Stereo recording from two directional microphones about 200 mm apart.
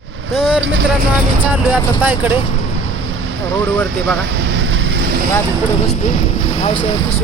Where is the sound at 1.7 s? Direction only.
10° right (ahead or behind).